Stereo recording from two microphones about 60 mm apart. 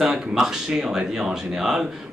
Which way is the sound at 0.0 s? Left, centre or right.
Centre.